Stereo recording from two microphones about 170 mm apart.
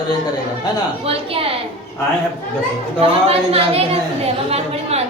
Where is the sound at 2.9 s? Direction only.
35° right (ahead or behind).